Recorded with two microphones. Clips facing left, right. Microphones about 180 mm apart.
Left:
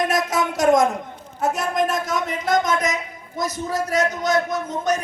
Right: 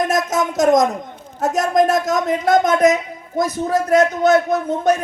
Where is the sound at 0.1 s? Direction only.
45° right (ahead or behind).